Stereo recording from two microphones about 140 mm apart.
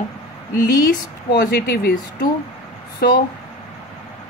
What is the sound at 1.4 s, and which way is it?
Speech, 80° left.